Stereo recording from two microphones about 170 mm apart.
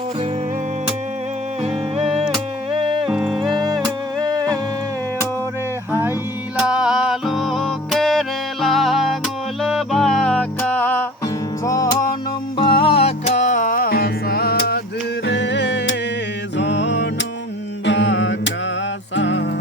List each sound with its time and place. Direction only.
1.6 s music: 35° right (ahead or behind)
3.1 s music: centre (ahead or behind)
3.5 s music: 25° right (ahead or behind)
5.9 s mantra: 10° right (ahead or behind)
6.6 s music: 5° right (ahead or behind); by 12.0 s 20° left (ahead or behind)
12.5 s music: 30° left (ahead or behind); by 14.8 s 70° left (ahead or behind)
15.3 s music: 90° left
17.8 s a sound: 90° left
19.1 s music: 90° left